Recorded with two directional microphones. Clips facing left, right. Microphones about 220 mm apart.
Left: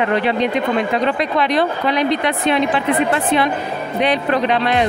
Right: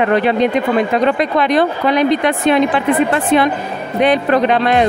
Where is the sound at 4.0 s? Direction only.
50° right (ahead or behind).